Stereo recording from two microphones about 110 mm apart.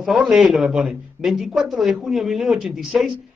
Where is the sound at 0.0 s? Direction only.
Centre (ahead or behind).